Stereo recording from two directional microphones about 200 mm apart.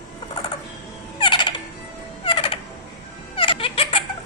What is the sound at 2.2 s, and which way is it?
Frog, 25° left (ahead or behind).